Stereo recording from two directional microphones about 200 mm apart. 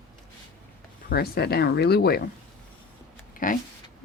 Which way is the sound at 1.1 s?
50° left (ahead or behind).